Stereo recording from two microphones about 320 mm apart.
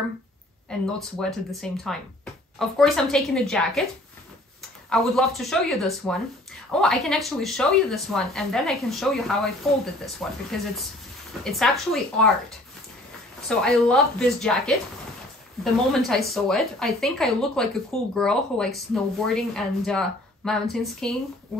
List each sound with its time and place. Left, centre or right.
0.7 s speech: centre
4.8 s speech: centre